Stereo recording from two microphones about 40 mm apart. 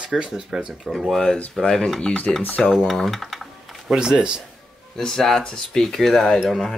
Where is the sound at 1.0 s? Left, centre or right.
Centre.